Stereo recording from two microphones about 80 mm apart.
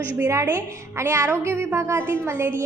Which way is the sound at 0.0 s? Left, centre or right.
Right.